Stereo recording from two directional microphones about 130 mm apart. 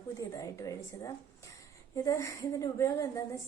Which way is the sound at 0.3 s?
25° left (ahead or behind).